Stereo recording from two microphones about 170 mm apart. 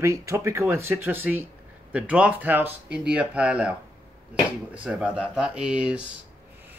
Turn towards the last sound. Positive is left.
turn(degrees=-5)  # may be behind; listen again after turning